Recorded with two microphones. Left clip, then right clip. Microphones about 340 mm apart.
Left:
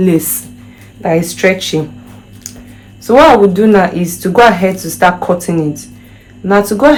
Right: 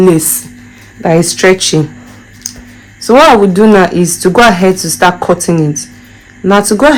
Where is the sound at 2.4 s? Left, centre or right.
Right.